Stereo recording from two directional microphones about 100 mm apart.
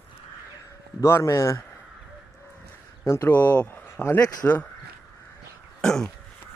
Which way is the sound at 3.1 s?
30° left (ahead or behind).